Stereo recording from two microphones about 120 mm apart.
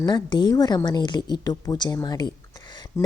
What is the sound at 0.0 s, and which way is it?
Speech, 40° left (ahead or behind).